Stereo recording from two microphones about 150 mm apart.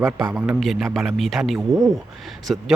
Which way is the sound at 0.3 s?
5° right (ahead or behind).